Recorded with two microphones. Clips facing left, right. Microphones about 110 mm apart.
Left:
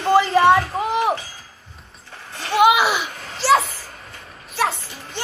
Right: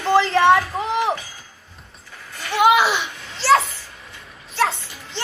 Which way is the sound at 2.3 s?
30° left (ahead or behind).